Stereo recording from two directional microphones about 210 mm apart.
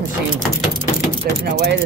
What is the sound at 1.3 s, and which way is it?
Speech, 45° right (ahead or behind).